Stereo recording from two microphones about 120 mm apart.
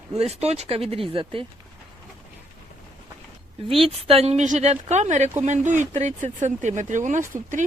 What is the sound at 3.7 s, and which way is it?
A woman's voice, 50° right (ahead or behind).